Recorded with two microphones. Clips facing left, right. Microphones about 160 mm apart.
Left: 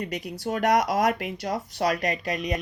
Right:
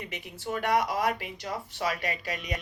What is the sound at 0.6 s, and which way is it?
Speech, 45° left (ahead or behind).